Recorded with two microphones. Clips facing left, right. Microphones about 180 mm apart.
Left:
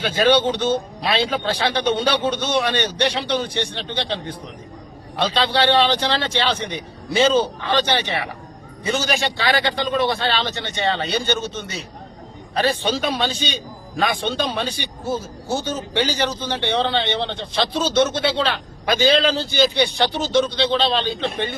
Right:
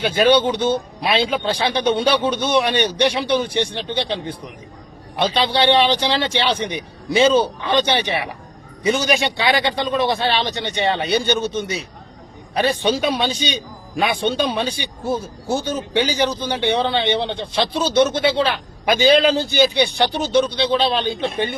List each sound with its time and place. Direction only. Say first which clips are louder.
0.0 s a man's voice: right 2 dB; 15° right (ahead or behind)
12.5 s a man's voice: right 2 dB; 15° right (ahead or behind)